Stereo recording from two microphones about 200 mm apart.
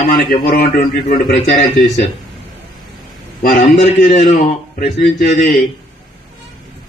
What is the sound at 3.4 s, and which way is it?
A man's voice, 45° left (ahead or behind).